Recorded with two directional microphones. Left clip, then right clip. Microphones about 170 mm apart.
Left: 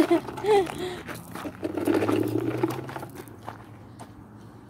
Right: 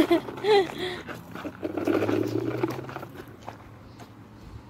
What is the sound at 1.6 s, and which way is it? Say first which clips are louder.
Sewing machine: left 1 dB; 5° left (ahead or behind).